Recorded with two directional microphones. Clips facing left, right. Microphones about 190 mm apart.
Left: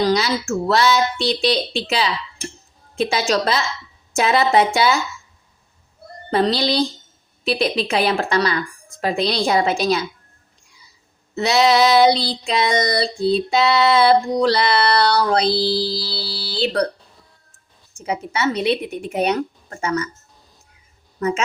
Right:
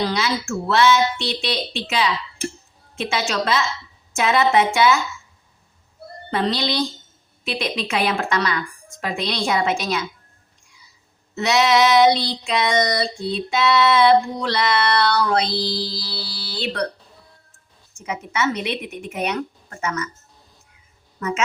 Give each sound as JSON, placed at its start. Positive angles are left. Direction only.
{"t": 0.0, "sound": "child singing", "side_deg": 40}
{"t": 6.3, "sound": "child singing", "side_deg": 35}
{"t": 11.3, "sound": "child singing", "side_deg": 35}
{"t": 17.9, "sound": "child singing", "side_deg": 35}
{"t": 21.2, "sound": "a woman's voice", "side_deg": 35}